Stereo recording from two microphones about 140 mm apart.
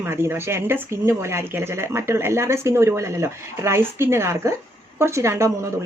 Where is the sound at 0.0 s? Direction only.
15° right (ahead or behind).